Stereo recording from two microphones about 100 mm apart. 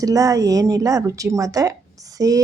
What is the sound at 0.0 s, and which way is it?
Speech, 35° right (ahead or behind).